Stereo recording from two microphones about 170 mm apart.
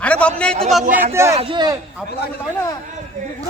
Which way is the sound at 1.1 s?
15° right (ahead or behind).